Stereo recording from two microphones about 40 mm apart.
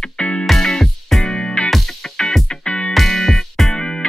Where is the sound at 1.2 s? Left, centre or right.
Left.